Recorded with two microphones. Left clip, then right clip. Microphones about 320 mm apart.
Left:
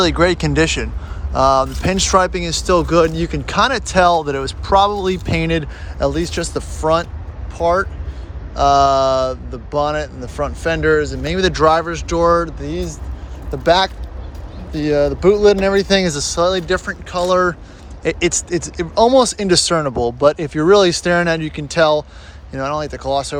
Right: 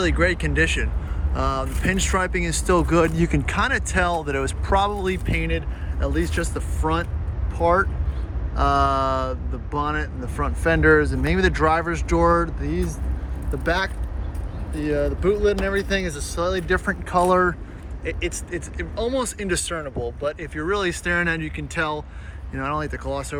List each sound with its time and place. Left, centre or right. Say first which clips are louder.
0.0 s speech: left 7 dB; centre
13.7 s speech: left 10 dB; centre
16.8 s speech: left 1 dB; centre
18.0 s speech: left 11 dB; centre